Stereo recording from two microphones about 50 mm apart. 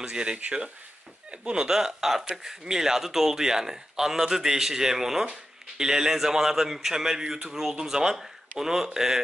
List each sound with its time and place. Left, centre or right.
0.0 s a man's voice: centre